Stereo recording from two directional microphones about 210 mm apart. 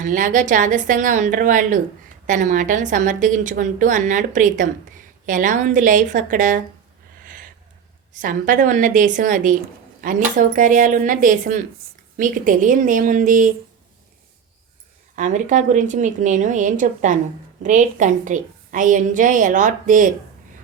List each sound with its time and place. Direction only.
0.0 s a woman's voice: 40° right (ahead or behind)
7.3 s a sound: 40° right (ahead or behind)
8.1 s a woman's voice: 40° right (ahead or behind)
15.1 s a woman's voice: 35° right (ahead or behind)